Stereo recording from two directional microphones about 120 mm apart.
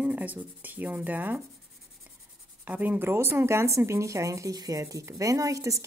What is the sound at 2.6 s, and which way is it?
Speech, 15° right (ahead or behind).